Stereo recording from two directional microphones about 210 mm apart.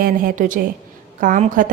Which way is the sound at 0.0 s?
40° right (ahead or behind).